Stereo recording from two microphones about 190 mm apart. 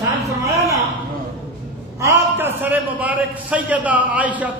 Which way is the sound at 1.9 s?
10° right (ahead or behind).